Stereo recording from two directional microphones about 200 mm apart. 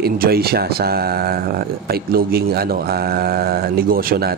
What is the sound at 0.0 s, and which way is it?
Speech, 50° right (ahead or behind).